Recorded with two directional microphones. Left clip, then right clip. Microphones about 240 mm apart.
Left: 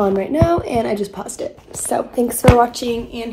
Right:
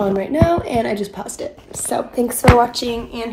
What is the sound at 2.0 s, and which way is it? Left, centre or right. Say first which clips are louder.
Speech: even; centre.